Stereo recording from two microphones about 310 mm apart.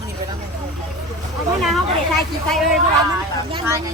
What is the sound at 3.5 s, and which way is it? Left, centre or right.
Speech, centre.